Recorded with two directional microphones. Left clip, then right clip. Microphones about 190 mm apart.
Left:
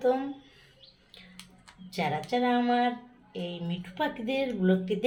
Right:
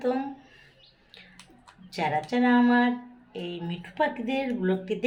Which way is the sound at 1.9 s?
25° right (ahead or behind).